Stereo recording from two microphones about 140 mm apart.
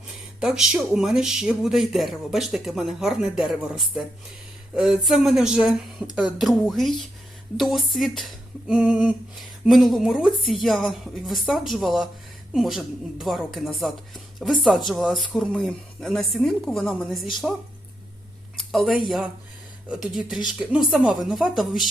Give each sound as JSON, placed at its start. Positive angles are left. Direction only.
{"t": 0.3, "sound": "speech", "side_deg": -5}
{"t": 4.7, "sound": "speech", "side_deg": -5}